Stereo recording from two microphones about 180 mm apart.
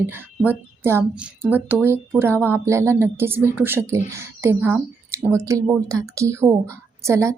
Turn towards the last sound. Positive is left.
turn(degrees=-15)  # may be behind; listen again after turning